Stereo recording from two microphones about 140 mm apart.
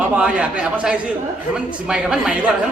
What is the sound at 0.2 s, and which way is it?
A man's voice, 10° right (ahead or behind).